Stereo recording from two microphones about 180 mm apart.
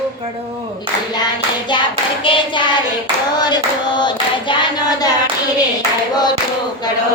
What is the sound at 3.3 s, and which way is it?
Child singing, 25° left (ahead or behind).